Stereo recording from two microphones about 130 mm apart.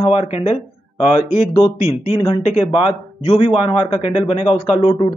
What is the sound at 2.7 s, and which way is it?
Speech, 45° left (ahead or behind).